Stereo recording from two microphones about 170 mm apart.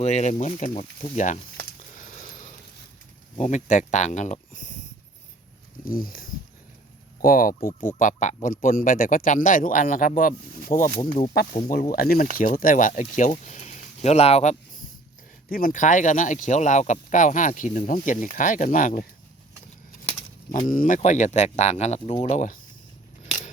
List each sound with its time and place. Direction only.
0.0 s speech: 40° left (ahead or behind)
2.0 s a sound: 50° left (ahead or behind)
3.3 s speech: 45° left (ahead or behind)
5.8 s speech: 55° left (ahead or behind)
7.9 s speech: 45° left (ahead or behind)
15.4 s speech: 55° left (ahead or behind)
20.7 s speech: 50° left (ahead or behind)